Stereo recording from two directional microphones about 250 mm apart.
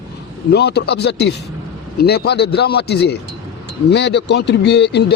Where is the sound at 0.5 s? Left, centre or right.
Left.